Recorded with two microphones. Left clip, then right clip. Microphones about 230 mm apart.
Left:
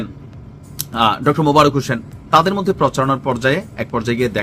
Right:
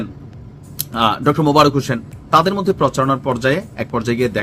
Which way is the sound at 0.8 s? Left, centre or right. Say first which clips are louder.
Left 1 dB; centre.